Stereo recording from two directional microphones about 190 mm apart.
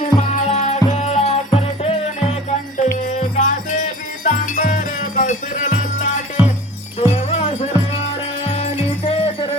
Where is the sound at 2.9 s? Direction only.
35° left (ahead or behind).